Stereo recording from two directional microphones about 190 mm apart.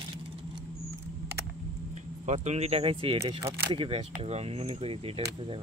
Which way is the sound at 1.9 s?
40° right (ahead or behind).